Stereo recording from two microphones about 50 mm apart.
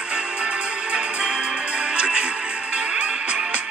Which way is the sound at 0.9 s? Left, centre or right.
Centre.